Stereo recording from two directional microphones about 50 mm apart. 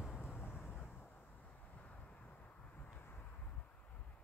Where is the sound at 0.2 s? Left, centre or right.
Left.